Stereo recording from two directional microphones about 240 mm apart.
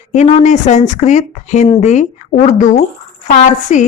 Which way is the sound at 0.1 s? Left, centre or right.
Left.